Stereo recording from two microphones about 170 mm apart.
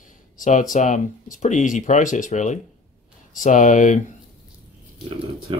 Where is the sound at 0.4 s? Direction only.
50° left (ahead or behind).